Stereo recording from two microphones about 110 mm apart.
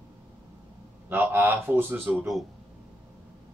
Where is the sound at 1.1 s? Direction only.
20° right (ahead or behind).